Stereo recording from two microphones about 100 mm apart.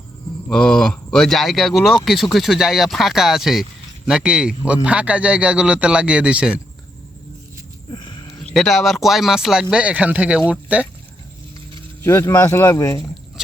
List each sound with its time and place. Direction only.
0.4 s speech: 10° left (ahead or behind); by 6.6 s 10° right (ahead or behind)
7.9 s a sound: 55° left (ahead or behind)
8.5 s speech: centre (ahead or behind); by 10.8 s 15° right (ahead or behind)
12.0 s speech: 30° left (ahead or behind)